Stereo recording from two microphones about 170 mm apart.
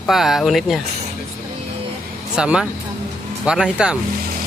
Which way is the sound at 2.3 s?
5° right (ahead or behind).